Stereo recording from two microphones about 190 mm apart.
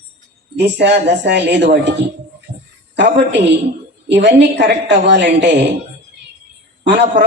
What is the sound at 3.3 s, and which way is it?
Speech, 65° right (ahead or behind).